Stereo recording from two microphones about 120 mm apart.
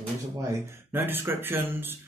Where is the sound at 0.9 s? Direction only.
20° right (ahead or behind).